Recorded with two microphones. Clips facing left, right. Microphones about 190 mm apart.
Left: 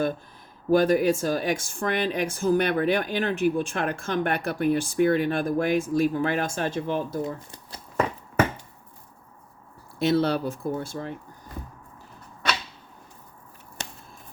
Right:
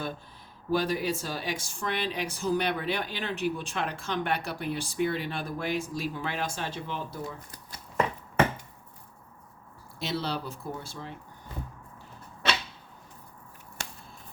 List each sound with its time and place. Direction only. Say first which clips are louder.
0.7 s speech: left 8 dB; 50° left (ahead or behind)
7.3 s speech: left 7 dB; 25° left (ahead or behind)
10.0 s speech: left 10 dB; 55° left (ahead or behind)
13.8 s a sound: left 2 dB; 20° left (ahead or behind)